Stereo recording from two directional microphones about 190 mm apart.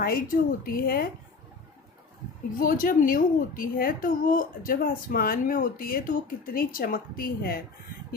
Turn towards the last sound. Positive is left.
turn(degrees=50)  # may be behind; listen again after turning